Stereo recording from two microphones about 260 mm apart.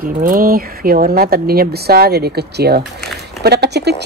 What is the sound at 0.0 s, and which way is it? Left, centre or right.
Speech, right.